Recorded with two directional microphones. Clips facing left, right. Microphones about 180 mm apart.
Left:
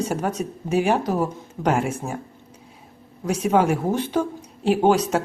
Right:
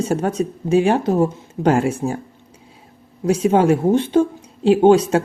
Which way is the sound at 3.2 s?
30° right (ahead or behind).